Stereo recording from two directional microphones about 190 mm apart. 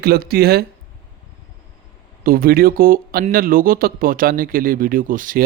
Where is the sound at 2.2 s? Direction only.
50° right (ahead or behind).